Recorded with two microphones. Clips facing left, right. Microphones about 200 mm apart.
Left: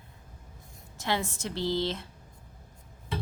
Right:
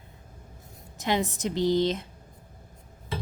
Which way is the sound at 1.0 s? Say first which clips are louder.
Right 4 dB; 20° right (ahead or behind).